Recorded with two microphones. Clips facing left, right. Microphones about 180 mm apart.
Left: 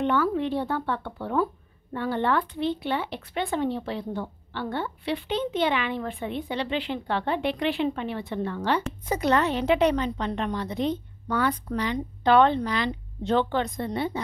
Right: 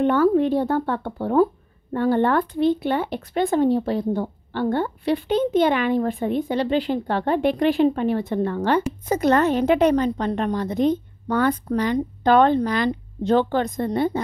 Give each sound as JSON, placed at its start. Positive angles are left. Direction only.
{"t": 0.0, "sound": "speech", "side_deg": -45}